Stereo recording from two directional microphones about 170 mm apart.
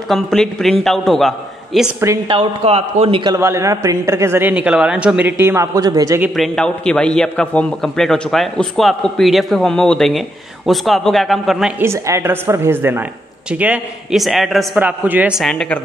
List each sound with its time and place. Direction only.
0.1 s a man's voice: centre (ahead or behind)
2.2 s a man's voice: 35° right (ahead or behind)
3.3 s a man's voice: 15° right (ahead or behind)
6.3 s a man's voice: centre (ahead or behind)
11.8 s a man's voice: 15° right (ahead or behind); by 15.8 s 5° left (ahead or behind)